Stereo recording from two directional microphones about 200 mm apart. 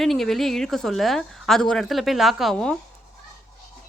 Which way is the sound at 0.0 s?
Centre (ahead or behind).